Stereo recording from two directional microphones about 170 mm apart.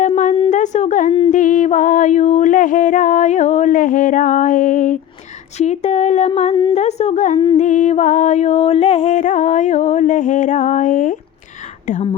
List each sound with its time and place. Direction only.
0.5 s a sound: 45° left (ahead or behind)
5.5 s speech: 40° left (ahead or behind)
6.5 s humming: 25° left (ahead or behind)
6.7 s a woman's voice: 40° left (ahead or behind)
7.5 s a sound: 45° left (ahead or behind)
11.9 s speech: 45° left (ahead or behind)